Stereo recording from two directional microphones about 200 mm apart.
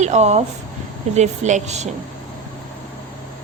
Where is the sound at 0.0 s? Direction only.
35° right (ahead or behind).